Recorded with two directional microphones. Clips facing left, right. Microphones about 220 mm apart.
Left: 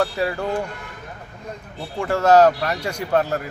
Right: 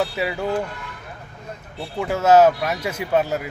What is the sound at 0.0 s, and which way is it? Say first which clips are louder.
Speech: left 2 dB; 5° right (ahead or behind).